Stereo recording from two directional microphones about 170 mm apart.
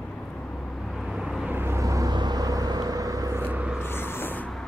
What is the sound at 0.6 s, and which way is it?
Vehicle, 5° left (ahead or behind).